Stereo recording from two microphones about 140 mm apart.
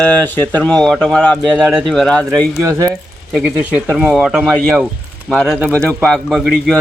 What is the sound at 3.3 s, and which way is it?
Speech, 5° right (ahead or behind).